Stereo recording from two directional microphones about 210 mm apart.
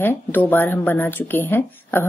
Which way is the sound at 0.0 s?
10° left (ahead or behind).